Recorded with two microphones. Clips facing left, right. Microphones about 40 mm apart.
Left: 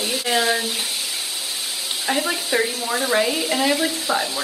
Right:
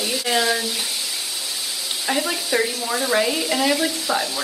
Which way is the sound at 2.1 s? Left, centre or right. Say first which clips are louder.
Even; centre.